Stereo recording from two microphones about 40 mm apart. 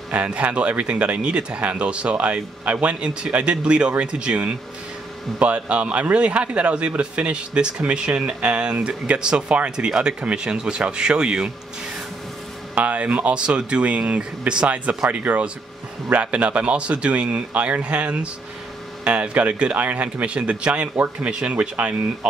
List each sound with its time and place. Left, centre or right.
0.1 s a man's voice: right
9.8 s speech: right
12.7 s a man's voice: right